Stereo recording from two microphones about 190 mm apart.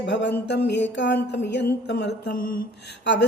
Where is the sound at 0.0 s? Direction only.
65° left (ahead or behind).